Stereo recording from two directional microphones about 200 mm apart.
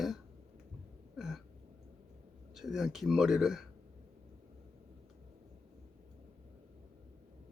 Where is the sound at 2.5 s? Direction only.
Centre (ahead or behind).